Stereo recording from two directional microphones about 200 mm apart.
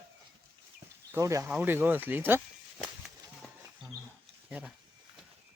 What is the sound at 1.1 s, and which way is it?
Speech, 15° right (ahead or behind).